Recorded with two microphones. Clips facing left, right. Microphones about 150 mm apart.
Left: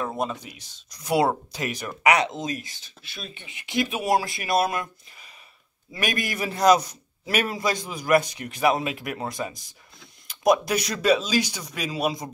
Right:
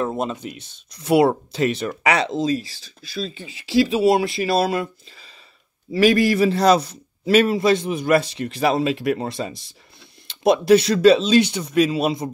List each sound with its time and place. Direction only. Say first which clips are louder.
0.2 s speech: right 3 dB; 20° right (ahead or behind)
5.9 s speech: right 13 dB; 30° right (ahead or behind)